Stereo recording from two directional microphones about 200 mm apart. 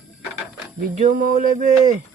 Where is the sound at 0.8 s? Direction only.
40° right (ahead or behind).